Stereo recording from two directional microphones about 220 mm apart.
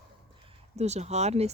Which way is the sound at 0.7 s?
30° right (ahead or behind).